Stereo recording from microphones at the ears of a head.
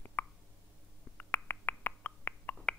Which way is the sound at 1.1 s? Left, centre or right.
Left.